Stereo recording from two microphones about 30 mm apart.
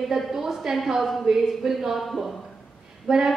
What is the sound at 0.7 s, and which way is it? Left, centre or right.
Speech, centre.